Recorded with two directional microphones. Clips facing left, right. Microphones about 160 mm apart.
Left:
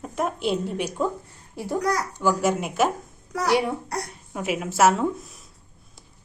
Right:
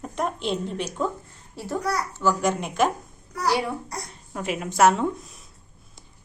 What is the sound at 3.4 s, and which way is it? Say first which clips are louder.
Speech: left 2 dB; 20° left (ahead or behind).